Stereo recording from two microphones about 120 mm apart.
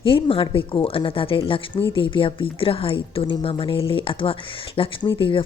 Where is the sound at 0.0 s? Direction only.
50° left (ahead or behind).